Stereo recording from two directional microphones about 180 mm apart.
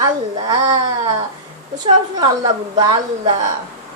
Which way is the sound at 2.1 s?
25° right (ahead or behind).